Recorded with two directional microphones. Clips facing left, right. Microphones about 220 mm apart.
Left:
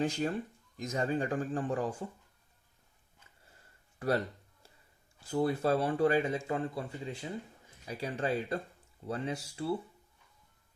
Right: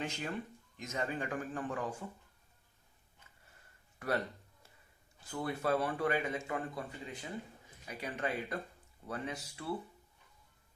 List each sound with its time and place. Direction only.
0.0 s speech: 35° left (ahead or behind)
5.3 s speech: 30° left (ahead or behind)